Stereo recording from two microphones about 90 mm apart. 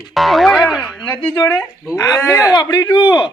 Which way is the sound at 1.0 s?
20° left (ahead or behind).